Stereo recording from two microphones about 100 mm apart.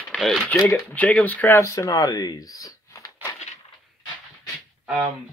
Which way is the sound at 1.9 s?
40° left (ahead or behind).